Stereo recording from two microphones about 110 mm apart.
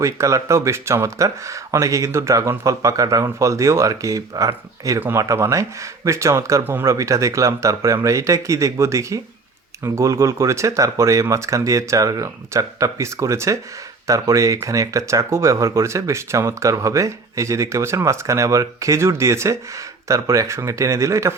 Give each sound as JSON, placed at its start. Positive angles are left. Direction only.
{"t": 0.0, "sound": "speech", "side_deg": -30}